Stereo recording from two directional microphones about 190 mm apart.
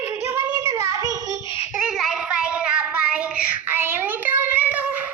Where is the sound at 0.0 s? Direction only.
10° right (ahead or behind).